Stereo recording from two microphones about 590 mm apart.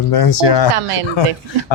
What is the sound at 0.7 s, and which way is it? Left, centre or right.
Speech, right.